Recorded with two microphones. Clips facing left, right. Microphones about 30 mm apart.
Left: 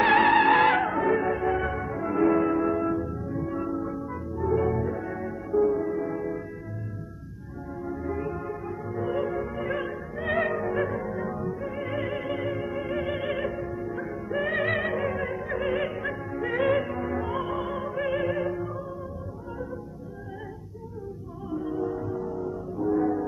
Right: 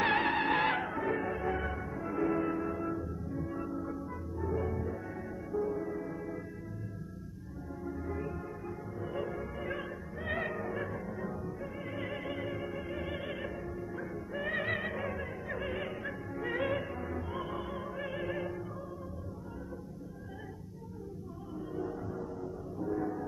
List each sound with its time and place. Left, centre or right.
0.0 s music: left
7.8 s music: centre
16.3 s music: centre
21.5 s music: left